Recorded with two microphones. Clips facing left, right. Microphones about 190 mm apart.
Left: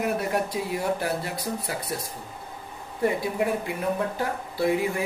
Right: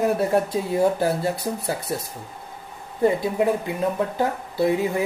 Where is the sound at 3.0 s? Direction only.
25° right (ahead or behind).